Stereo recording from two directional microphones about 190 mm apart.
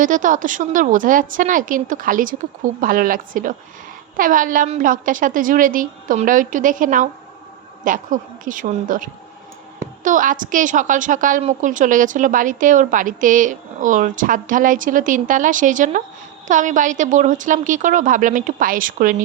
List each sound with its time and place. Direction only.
0.0 s a woman's voice: 45° right (ahead or behind)